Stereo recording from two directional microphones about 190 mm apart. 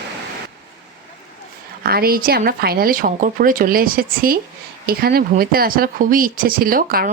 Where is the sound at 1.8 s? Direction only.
55° right (ahead or behind).